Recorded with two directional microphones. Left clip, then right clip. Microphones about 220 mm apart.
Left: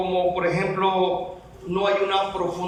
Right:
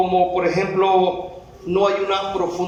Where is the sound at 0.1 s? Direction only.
25° right (ahead or behind).